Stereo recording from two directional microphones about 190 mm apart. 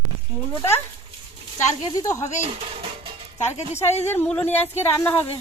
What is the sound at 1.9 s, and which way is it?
Speech, 20° left (ahead or behind).